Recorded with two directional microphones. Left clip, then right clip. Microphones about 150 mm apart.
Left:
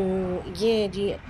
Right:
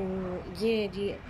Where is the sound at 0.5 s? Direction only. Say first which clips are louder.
Left 5 dB; 10° right (ahead or behind).